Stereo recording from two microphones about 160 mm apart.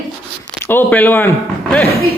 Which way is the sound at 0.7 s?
10° left (ahead or behind).